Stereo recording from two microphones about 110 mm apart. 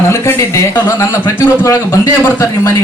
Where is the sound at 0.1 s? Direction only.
25° left (ahead or behind).